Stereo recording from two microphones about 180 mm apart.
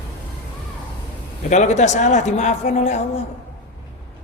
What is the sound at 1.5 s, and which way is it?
A man's voice, 40° left (ahead or behind).